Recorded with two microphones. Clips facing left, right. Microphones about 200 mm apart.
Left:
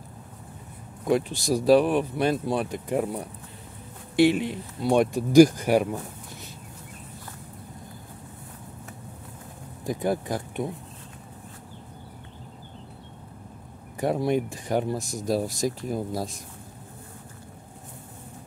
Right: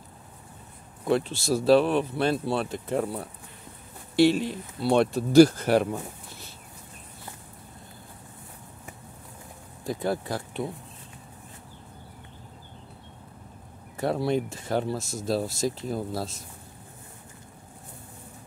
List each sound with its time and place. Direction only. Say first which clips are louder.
1.0 s speech: left 1 dB; 15° left (ahead or behind)
4.3 s speech: even; 60° left (ahead or behind)
4.8 s speech: left 1 dB; 15° left (ahead or behind)
9.8 s speech: left 2 dB; 15° left (ahead or behind)
13.9 s speech: left 1 dB; 15° left (ahead or behind)